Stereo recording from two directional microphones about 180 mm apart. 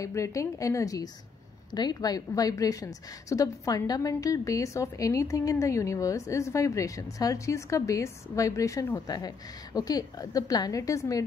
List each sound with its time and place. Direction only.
0.0 s a woman's voice: 15° left (ahead or behind)